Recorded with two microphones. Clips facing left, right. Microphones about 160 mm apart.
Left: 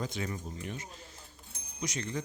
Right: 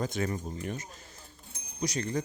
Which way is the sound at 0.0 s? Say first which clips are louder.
Right 5 dB; 45° right (ahead or behind).